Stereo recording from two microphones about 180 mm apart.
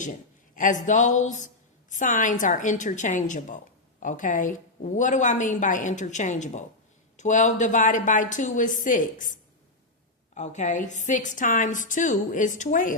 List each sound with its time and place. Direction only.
0.5 s a woman's voice: 45° left (ahead or behind)
10.3 s a woman's voice: 40° left (ahead or behind)